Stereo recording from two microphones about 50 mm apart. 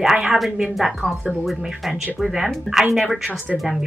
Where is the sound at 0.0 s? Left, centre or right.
Centre.